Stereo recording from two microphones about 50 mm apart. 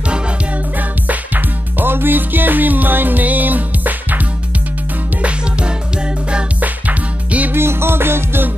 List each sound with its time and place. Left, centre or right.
0.7 s music: right
5.2 s music: right
7.5 s music: right